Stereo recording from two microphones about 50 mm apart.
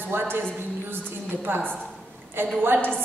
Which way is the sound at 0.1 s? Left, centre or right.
Right.